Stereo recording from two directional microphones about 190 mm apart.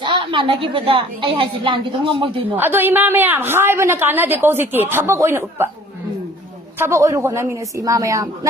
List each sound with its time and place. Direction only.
0.0 s a woman's voice: 25° right (ahead or behind)
2.6 s a woman's voice: 10° right (ahead or behind)
6.7 s a woman's voice: 15° right (ahead or behind)